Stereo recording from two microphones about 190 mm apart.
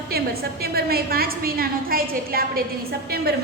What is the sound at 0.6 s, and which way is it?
A woman's voice, 55° right (ahead or behind).